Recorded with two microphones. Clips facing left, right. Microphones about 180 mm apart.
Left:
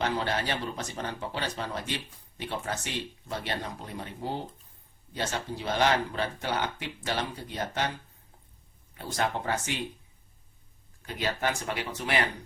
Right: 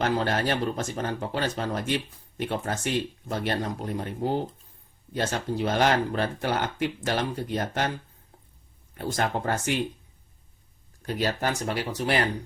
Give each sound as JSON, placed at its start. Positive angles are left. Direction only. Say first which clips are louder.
{"t": 0.0, "sound": "speech", "louder": "right 4 dB", "side_deg": -45}
{"t": 9.0, "sound": "speech", "louder": "right 3 dB", "side_deg": -50}
{"t": 11.0, "sound": "speech", "louder": "right 3 dB", "side_deg": -40}